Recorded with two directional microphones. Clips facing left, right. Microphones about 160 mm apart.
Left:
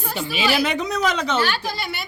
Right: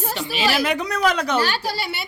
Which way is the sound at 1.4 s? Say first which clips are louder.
Right 1 dB; 35° right (ahead or behind).